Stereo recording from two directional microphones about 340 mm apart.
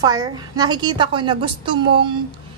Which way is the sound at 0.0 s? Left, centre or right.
Centre.